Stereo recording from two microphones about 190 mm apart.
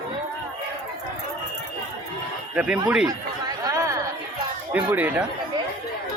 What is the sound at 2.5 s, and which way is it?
Speech, 5° right (ahead or behind).